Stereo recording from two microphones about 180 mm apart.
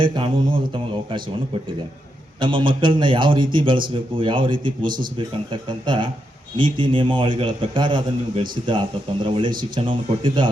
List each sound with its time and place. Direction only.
0.0 s a man's voice: 25° right (ahead or behind)
2.4 s a man's voice: 25° right (ahead or behind)